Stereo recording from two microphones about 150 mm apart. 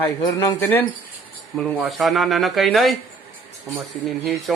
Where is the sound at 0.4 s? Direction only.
15° left (ahead or behind).